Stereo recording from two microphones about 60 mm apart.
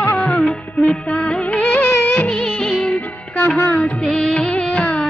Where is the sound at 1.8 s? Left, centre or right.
Left.